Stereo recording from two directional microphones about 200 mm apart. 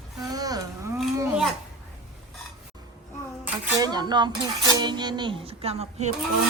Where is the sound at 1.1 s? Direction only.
15° right (ahead or behind).